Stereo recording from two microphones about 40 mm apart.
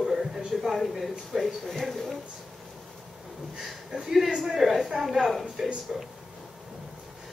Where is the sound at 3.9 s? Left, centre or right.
Centre.